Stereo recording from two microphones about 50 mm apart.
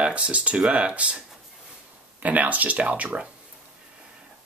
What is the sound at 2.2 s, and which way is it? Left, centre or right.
Speech, right.